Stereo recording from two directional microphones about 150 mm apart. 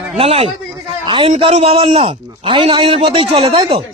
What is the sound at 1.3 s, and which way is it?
A man's voice, 45° right (ahead or behind).